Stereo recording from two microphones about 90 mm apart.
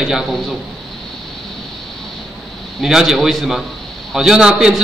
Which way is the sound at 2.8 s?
Centre (ahead or behind).